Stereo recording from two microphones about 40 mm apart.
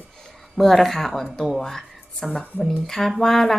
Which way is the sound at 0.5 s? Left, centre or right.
Centre.